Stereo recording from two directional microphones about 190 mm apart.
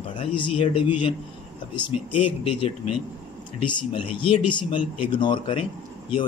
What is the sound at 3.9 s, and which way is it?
Speech, 25° left (ahead or behind).